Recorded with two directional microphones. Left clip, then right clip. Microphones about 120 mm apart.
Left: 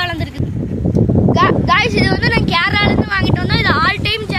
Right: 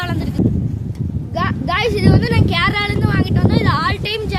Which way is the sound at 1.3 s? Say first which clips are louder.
Left 6 dB; 15° right (ahead or behind).